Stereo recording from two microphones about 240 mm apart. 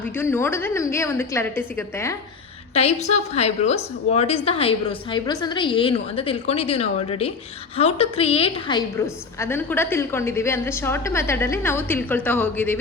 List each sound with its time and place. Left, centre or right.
0.0 s a woman's voice: centre
2.7 s a woman's voice: left; by 12.8 s centre